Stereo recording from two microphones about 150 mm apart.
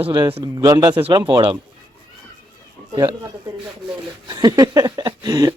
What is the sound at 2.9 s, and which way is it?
Speech, 25° right (ahead or behind).